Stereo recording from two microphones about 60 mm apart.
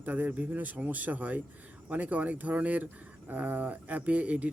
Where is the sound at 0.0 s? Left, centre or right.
Right.